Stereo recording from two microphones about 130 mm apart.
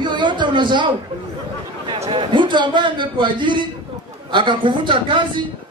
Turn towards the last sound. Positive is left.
turn(degrees=-40)  # may be behind; listen again after turning